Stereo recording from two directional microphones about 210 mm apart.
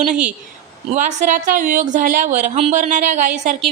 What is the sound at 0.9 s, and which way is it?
Speech, 35° right (ahead or behind).